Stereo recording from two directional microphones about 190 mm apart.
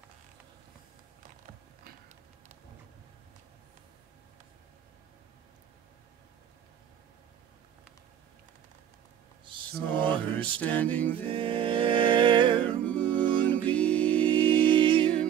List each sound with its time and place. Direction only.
9.5 s mantra: 25° right (ahead or behind)
10.3 s music: 10° left (ahead or behind)
11.2 s music: 30° right (ahead or behind)
12.6 s music: 5° left (ahead or behind)
14.5 s music: 25° right (ahead or behind)